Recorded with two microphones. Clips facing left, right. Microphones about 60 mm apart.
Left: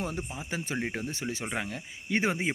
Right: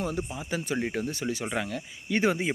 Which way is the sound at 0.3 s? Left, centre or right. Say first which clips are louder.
Right 3 dB; left.